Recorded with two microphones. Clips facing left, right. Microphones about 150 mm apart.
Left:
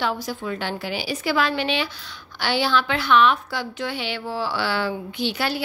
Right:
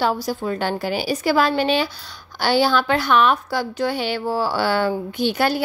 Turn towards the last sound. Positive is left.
turn(degrees=-45)  # may be behind; listen again after turning